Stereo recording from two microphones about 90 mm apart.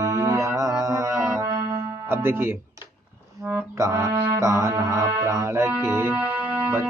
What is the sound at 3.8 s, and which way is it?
Music, 35° right (ahead or behind).